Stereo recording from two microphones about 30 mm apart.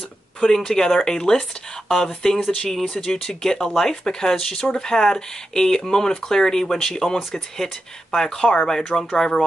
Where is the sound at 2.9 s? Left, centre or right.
Left.